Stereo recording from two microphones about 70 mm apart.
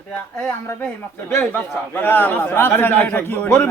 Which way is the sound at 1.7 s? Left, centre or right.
Left.